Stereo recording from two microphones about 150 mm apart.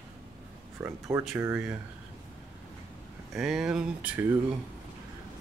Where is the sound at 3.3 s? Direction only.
5° right (ahead or behind).